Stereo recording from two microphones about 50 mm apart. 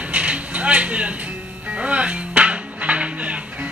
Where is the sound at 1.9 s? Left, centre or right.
Right.